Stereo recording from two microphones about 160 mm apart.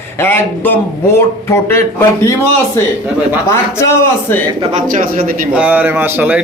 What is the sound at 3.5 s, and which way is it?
Speech, 15° left (ahead or behind).